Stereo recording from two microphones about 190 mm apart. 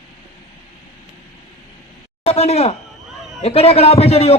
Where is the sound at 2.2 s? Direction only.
30° left (ahead or behind).